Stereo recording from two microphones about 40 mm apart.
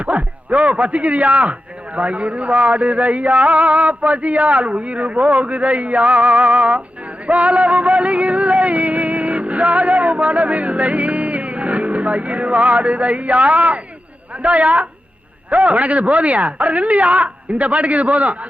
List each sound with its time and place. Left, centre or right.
0.0 s music: right